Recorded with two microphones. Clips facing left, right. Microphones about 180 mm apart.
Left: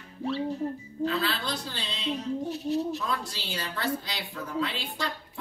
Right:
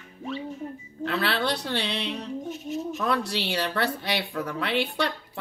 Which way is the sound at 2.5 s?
35° left (ahead or behind).